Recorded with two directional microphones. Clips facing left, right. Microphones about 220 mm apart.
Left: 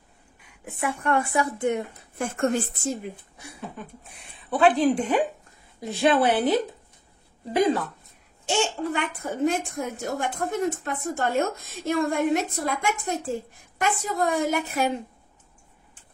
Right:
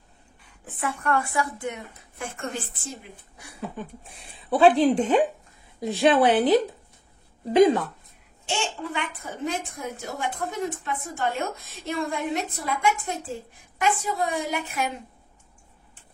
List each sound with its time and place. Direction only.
0.5 s speech: 10° left (ahead or behind)
2.1 s a woman's voice: 45° left (ahead or behind)
4.3 s speech: 30° right (ahead or behind)
8.5 s a woman's voice: 40° left (ahead or behind)